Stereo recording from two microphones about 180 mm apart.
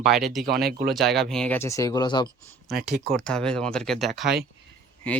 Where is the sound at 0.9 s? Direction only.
Centre (ahead or behind).